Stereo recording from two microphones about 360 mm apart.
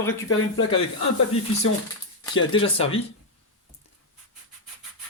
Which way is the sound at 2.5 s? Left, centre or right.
Centre.